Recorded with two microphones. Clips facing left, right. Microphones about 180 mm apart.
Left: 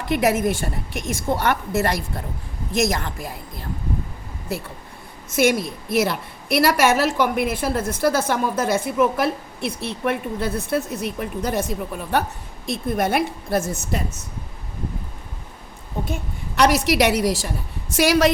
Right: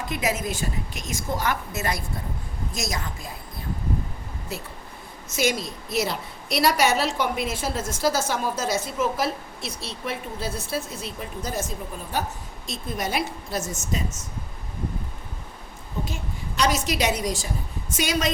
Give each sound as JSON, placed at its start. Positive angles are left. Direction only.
{"t": 0.1, "sound": "a woman's voice", "side_deg": 60}
{"t": 5.3, "sound": "a woman's voice", "side_deg": 55}
{"t": 16.6, "sound": "a woman's voice", "side_deg": 70}